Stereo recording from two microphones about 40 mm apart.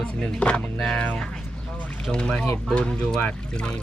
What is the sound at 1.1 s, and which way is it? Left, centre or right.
Speech, centre.